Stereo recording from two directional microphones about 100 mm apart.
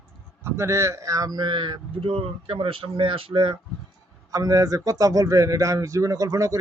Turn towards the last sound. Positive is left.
turn(degrees=-35)  # may be behind; listen again after turning